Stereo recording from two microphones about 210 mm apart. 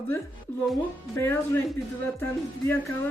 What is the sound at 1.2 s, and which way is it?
Speech, 10° left (ahead or behind).